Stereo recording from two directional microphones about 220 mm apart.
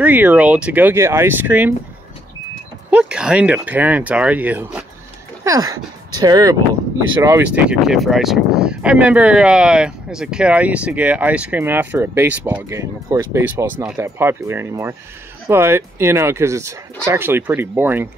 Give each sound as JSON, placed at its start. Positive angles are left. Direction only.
{"t": 0.0, "sound": "speech", "side_deg": -5}
{"t": 2.9, "sound": "speech", "side_deg": -5}
{"t": 7.5, "sound": "speech", "side_deg": 0}